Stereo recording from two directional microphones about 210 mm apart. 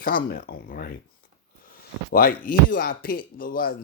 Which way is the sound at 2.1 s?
45° left (ahead or behind).